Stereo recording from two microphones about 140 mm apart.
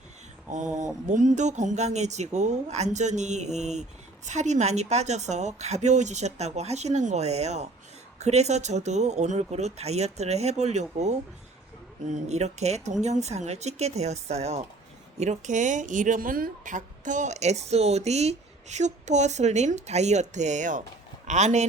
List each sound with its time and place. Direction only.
0.5 s a woman's voice: 60° right (ahead or behind)